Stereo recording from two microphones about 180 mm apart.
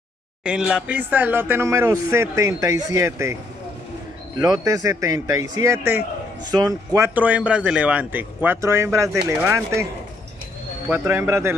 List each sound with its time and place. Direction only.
0.4 s speech: 5° right (ahead or behind)
4.4 s speech: 20° right (ahead or behind)
7.2 s speech: 10° right (ahead or behind)
10.9 s speech: 15° right (ahead or behind)